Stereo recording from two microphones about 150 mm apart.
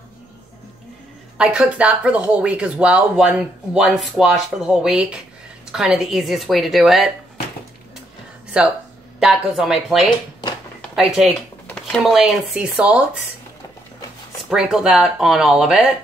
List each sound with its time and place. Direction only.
1.4 s a woman's voice: 5° right (ahead or behind)
8.5 s a woman's voice: 5° right (ahead or behind)
11.6 s a sound: 5° left (ahead or behind)
12.0 s a woman's voice: centre (ahead or behind)
14.5 s a woman's voice: 5° right (ahead or behind)